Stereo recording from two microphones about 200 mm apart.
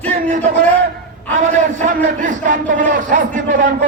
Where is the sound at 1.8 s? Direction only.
40° right (ahead or behind).